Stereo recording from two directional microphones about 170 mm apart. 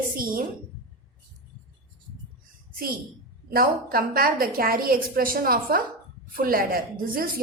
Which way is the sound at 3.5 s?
60° right (ahead or behind).